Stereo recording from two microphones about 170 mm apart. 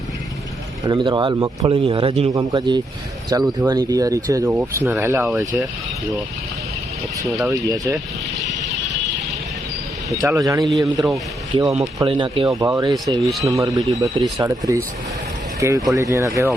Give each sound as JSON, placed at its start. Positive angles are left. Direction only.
{"t": 0.9, "sound": "a man's voice", "side_deg": -25}
{"t": 2.3, "sound": "a man's voice", "side_deg": -20}
{"t": 10.2, "sound": "a man's voice", "side_deg": -20}
{"t": 11.9, "sound": "a man's voice", "side_deg": -30}